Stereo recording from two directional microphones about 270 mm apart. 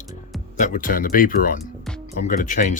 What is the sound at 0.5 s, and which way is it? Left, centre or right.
Speech, left.